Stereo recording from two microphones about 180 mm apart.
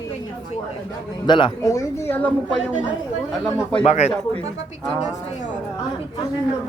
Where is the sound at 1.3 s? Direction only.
25° left (ahead or behind).